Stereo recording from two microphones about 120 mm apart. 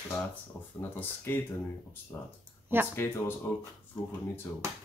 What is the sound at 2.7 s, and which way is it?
Speech, 20° right (ahead or behind).